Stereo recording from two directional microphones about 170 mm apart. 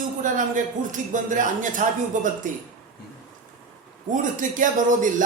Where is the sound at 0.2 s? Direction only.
50° right (ahead or behind).